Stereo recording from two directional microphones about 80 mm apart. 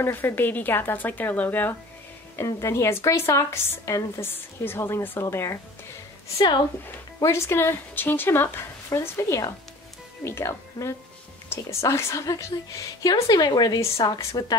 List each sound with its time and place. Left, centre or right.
0.0 s speech: left
2.3 s a woman's voice: left
7.2 s a woman's voice: left
13.1 s speech: left